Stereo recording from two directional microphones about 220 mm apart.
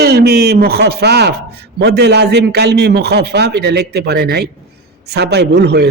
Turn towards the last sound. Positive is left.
turn(degrees=-50)  # may be behind; listen again after turning